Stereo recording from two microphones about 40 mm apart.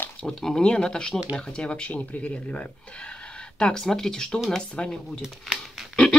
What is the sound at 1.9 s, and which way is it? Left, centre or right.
Speech, left.